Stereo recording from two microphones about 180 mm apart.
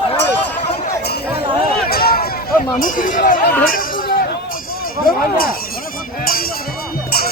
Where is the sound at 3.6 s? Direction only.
50° left (ahead or behind).